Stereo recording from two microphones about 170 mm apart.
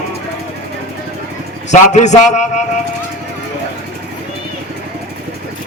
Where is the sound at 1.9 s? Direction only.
45° left (ahead or behind).